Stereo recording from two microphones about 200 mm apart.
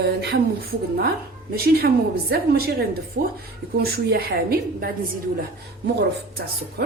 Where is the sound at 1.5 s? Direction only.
50° right (ahead or behind).